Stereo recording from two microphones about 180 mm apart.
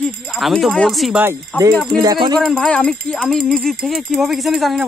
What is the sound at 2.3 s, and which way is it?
Speech, 5° left (ahead or behind).